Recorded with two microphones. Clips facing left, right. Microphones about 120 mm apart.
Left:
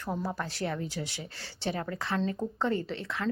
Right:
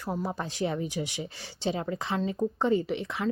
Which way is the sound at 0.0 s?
10° right (ahead or behind).